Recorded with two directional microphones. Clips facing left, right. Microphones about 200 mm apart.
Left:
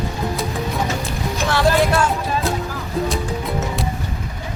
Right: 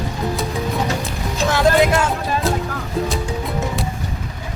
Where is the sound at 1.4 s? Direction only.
15° right (ahead or behind).